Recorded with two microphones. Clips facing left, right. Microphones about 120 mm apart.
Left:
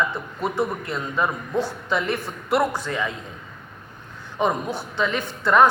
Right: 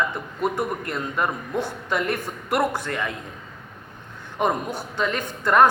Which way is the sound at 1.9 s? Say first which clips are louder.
Even; 50° right (ahead or behind).